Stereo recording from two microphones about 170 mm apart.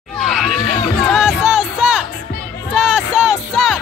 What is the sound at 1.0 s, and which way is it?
Music, centre (ahead or behind).